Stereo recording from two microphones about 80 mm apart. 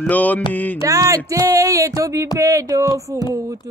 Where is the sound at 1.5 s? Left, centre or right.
Right.